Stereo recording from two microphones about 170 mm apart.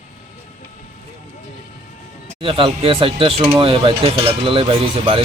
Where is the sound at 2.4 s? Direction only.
30° right (ahead or behind).